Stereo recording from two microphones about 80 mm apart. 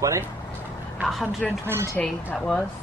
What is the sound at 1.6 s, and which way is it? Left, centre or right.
Speech, right.